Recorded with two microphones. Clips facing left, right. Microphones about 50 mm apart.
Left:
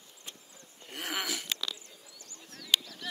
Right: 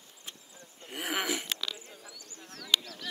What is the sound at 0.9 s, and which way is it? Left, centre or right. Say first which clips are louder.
Speech: right 3 dB; centre.